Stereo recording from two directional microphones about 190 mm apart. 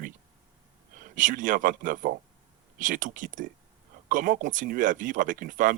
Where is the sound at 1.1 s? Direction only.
45° right (ahead or behind).